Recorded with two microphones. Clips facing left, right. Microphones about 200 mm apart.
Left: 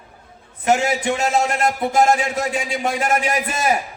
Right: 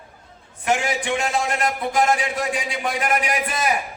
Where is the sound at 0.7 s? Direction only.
40° left (ahead or behind).